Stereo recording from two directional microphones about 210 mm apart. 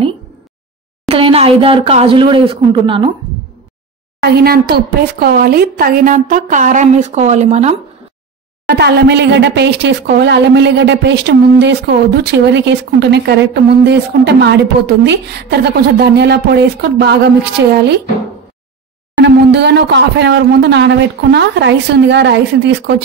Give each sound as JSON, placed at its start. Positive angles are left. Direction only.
{"t": 1.0, "sound": "speech", "side_deg": -30}
{"t": 4.2, "sound": "a woman's voice", "side_deg": -50}
{"t": 8.6, "sound": "speech", "side_deg": -50}
{"t": 19.2, "sound": "speech", "side_deg": -55}